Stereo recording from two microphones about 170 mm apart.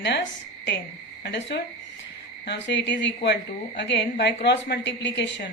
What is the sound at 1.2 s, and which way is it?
A woman's voice, 90° left.